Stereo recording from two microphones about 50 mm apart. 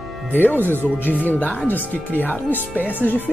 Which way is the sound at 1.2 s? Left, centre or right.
Left.